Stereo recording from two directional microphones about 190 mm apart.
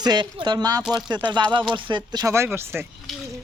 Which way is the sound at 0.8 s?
5° right (ahead or behind).